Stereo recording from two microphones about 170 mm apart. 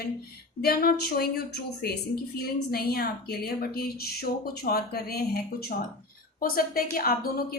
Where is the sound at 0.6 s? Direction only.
60° left (ahead or behind).